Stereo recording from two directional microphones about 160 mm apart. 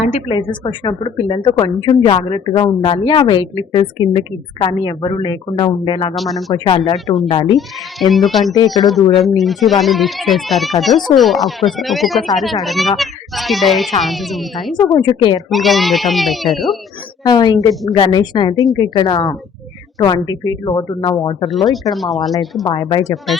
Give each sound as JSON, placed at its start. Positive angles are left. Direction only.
{"t": 0.3, "sound": "a woman's voice", "side_deg": 30}
{"t": 6.1, "sound": "speech", "side_deg": 0}
{"t": 6.7, "sound": "speech", "side_deg": 30}
{"t": 6.9, "sound": "speech", "side_deg": 0}
{"t": 8.5, "sound": "a woman's voice", "side_deg": 25}
{"t": 9.2, "sound": "speech", "side_deg": 0}
{"t": 14.9, "sound": "a woman's voice", "side_deg": 30}
{"t": 15.4, "sound": "speech", "side_deg": 0}
{"t": 17.2, "sound": "a woman's voice", "side_deg": 25}
{"t": 21.9, "sound": "speech", "side_deg": 0}
{"t": 22.9, "sound": "a woman's voice", "side_deg": 25}